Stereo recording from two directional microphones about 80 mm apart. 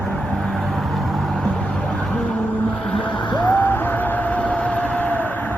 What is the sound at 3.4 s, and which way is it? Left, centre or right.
Music, centre.